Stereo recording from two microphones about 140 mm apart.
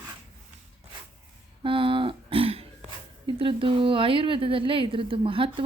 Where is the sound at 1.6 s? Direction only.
40° right (ahead or behind).